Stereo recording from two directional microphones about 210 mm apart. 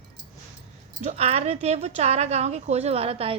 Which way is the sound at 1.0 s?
30° right (ahead or behind).